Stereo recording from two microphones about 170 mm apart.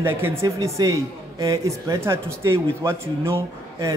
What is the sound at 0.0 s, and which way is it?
A man's voice, 15° right (ahead or behind).